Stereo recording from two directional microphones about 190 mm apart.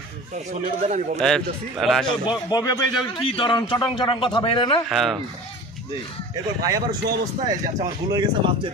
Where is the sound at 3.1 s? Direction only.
25° left (ahead or behind).